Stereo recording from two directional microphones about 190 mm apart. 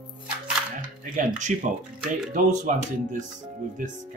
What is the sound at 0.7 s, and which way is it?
Speech, 40° right (ahead or behind).